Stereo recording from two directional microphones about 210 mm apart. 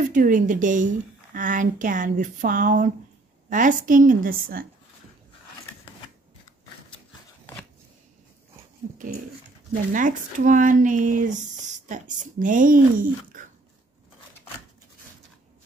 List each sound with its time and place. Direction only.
0.1 s speech: 40° right (ahead or behind)
9.9 s speech: 40° right (ahead or behind)